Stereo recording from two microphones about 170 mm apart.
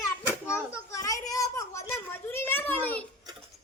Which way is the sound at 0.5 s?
15° left (ahead or behind).